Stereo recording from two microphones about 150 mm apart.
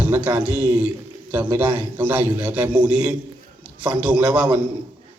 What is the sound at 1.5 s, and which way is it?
Speech, 35° right (ahead or behind).